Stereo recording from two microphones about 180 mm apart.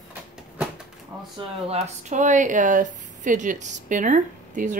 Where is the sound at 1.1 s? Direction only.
5° right (ahead or behind).